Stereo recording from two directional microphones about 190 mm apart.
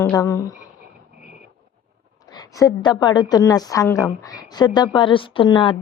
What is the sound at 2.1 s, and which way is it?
A woman's voice, 20° left (ahead or behind).